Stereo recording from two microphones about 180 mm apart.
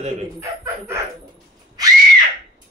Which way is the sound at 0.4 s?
15° right (ahead or behind).